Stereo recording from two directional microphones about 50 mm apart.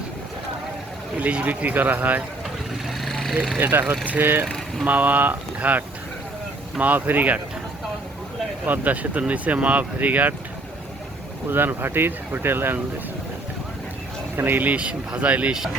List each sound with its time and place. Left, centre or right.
1.1 s speech: right
3.0 s a sound: centre
3.6 s speech: right
8.6 s speech: right
11.4 s speech: right
14.3 s speech: right